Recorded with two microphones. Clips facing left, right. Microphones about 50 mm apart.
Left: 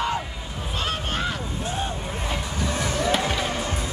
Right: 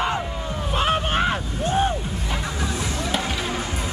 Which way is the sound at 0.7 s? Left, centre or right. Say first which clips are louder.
Right 7 dB; right.